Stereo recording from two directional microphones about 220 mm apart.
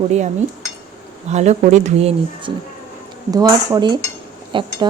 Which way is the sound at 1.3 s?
30° right (ahead or behind).